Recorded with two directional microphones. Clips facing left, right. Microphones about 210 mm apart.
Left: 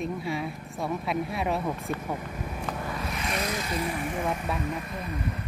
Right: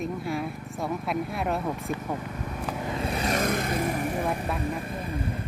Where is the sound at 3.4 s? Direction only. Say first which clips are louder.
Right 4 dB; 55° right (ahead or behind); by 5.2 s 30° right (ahead or behind).